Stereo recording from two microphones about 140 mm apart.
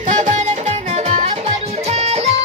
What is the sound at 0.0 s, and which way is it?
Music, 65° right (ahead or behind).